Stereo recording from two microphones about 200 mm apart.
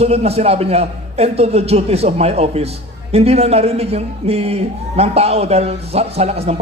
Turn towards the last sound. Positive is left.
turn(degrees=-30)  # may be behind; listen again after turning